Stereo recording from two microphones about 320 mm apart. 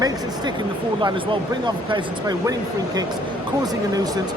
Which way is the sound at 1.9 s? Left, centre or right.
Centre.